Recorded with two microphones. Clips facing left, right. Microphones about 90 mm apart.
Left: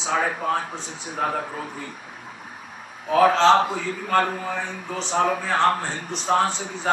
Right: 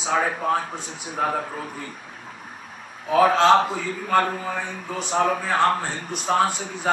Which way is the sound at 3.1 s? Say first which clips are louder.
Even; 5° right (ahead or behind).